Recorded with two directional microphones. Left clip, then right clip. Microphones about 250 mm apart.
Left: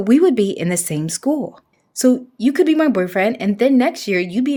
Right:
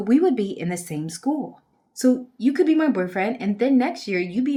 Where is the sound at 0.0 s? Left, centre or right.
Left.